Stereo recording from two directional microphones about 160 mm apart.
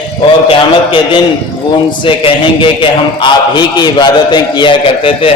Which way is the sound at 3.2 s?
30° left (ahead or behind).